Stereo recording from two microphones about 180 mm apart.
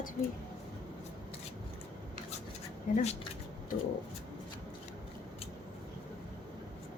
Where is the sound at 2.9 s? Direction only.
40° left (ahead or behind).